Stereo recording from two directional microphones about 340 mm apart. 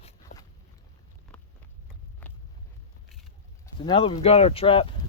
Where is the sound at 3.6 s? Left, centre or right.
Centre.